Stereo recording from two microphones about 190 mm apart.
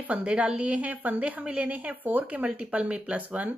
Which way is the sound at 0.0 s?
5° right (ahead or behind).